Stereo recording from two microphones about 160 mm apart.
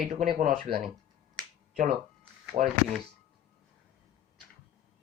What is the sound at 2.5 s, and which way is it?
Speech, 40° right (ahead or behind).